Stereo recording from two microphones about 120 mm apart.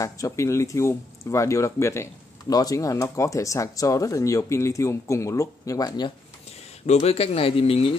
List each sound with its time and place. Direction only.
0.0 s speech: 25° left (ahead or behind)
6.9 s speech: 65° left (ahead or behind)